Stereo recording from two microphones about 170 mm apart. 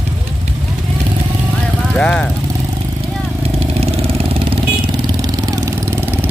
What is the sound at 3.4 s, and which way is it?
Vehicle, 35° right (ahead or behind).